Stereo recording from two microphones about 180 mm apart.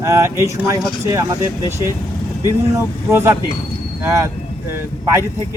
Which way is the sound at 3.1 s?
15° right (ahead or behind).